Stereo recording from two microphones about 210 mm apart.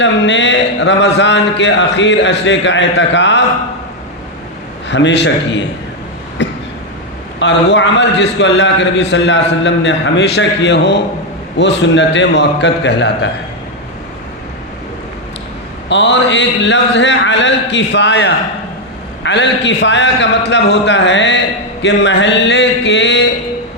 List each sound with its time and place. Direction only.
0.0 s a man's voice: 60° left (ahead or behind)
4.9 s a man's voice: 55° left (ahead or behind)
6.4 s a sound: 55° left (ahead or behind)
7.3 s a man's voice: 60° left (ahead or behind)
15.9 s a man's voice: 60° left (ahead or behind)